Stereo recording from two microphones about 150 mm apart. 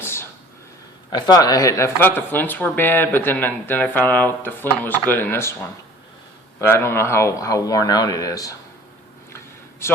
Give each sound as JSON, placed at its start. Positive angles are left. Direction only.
{"t": 0.0, "sound": "a sound", "side_deg": 15}
{"t": 1.1, "sound": "speech", "side_deg": 25}
{"t": 6.6, "sound": "a man's voice", "side_deg": 15}
{"t": 9.8, "sound": "a man's voice", "side_deg": 15}